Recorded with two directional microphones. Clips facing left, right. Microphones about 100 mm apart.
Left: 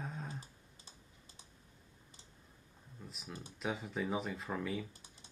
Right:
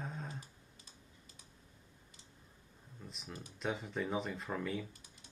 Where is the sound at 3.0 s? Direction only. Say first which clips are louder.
Even; centre (ahead or behind).